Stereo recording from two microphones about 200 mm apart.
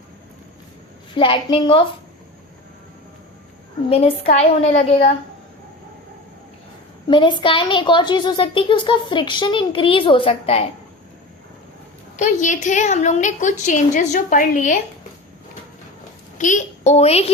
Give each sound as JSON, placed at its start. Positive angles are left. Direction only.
{"t": 1.1, "sound": "a woman's voice", "side_deg": 25}
{"t": 3.8, "sound": "a woman's voice", "side_deg": 30}
{"t": 7.1, "sound": "a woman's voice", "side_deg": 25}
{"t": 12.1, "sound": "a woman's voice", "side_deg": 40}
{"t": 16.4, "sound": "a woman's voice", "side_deg": 40}